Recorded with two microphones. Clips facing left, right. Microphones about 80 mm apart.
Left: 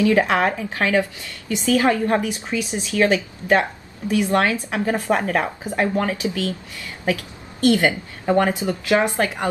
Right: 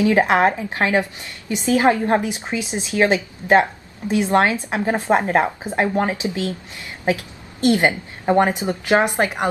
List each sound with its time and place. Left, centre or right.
0.0 s a woman's voice: right